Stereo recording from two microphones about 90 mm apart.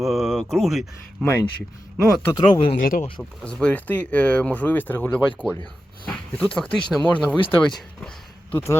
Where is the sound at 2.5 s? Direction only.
80° left.